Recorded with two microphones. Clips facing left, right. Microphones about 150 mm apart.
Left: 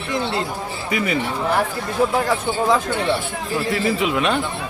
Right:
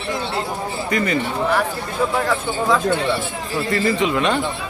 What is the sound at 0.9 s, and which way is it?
Speech, 5° left (ahead or behind).